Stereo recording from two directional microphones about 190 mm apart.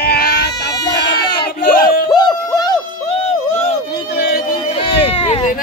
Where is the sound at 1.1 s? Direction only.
55° left (ahead or behind).